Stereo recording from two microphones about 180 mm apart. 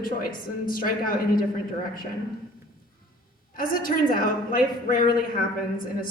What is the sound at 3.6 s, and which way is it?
A woman's voice, 50° left (ahead or behind).